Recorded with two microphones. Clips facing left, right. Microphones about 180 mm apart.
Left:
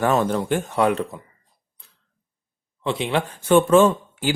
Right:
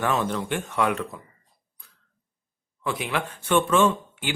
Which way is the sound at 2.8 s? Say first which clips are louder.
Left 5 dB; 25° left (ahead or behind).